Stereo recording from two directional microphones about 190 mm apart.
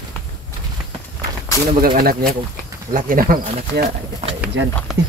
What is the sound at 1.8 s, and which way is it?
Speech, 50° right (ahead or behind).